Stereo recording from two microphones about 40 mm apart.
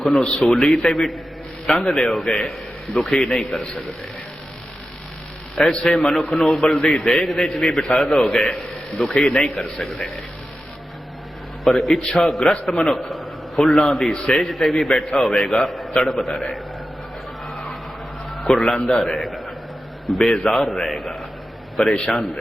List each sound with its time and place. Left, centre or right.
0.1 s a man's voice: centre
5.6 s a man's voice: centre
11.6 s a man's voice: centre
12.7 s a man's voice: centre
18.4 s a man's voice: centre
19.2 s a sound: centre
20.1 s a man's voice: centre